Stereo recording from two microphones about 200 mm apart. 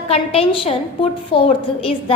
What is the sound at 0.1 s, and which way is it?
A woman's voice, 30° left (ahead or behind).